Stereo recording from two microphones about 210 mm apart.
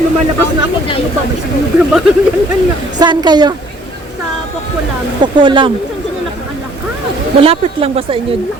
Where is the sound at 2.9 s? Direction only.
20° right (ahead or behind).